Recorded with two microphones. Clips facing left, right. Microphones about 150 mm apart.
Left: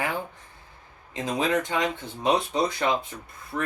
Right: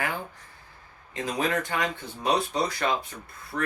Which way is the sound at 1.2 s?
20° left (ahead or behind).